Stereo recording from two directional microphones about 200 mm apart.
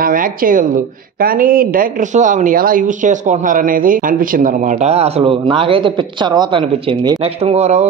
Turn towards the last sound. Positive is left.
turn(degrees=-30)  # may be behind; listen again after turning